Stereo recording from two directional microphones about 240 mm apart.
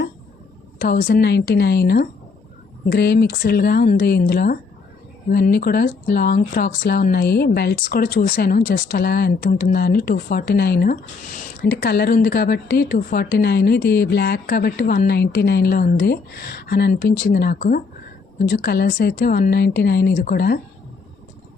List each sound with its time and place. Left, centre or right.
0.8 s speech: left